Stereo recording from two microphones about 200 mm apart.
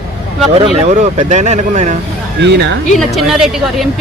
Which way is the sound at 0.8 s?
35° right (ahead or behind).